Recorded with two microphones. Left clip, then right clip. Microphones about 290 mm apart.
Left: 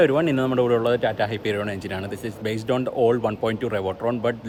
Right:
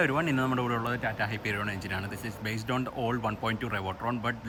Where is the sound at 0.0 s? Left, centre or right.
Centre.